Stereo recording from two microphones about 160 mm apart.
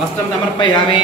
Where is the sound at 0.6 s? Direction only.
30° left (ahead or behind).